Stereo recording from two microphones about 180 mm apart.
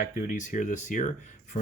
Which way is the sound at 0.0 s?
45° left (ahead or behind).